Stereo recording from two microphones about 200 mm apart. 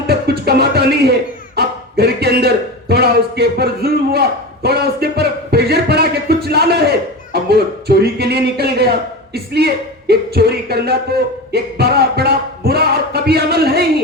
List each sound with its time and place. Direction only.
0.1 s music: 55° right (ahead or behind)
1.5 s a sound: 55° right (ahead or behind)
7.3 s speech: 55° right (ahead or behind)
9.3 s music: 55° right (ahead or behind)